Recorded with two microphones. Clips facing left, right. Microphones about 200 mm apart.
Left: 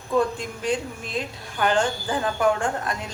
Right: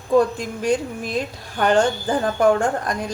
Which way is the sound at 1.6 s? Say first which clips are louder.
Right 5 dB; 40° right (ahead or behind).